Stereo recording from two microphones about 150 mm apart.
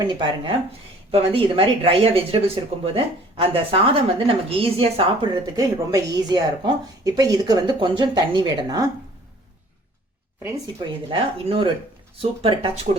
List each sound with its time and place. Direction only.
0.0 s a woman's voice: 30° right (ahead or behind)
11.1 s a woman's voice: 35° right (ahead or behind)